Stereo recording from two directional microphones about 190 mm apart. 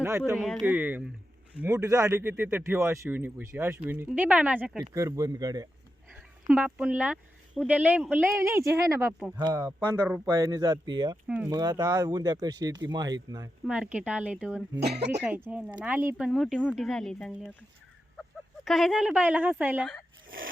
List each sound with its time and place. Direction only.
0.0 s speech: 10° right (ahead or behind)
0.3 s speech: centre (ahead or behind); by 5.6 s 20° right (ahead or behind)
6.5 s speech: 5° right (ahead or behind)
9.4 s speech: 15° right (ahead or behind)
11.3 s speech: 5° right (ahead or behind)
11.5 s speech: 20° right (ahead or behind)
13.7 s speech: 5° right (ahead or behind)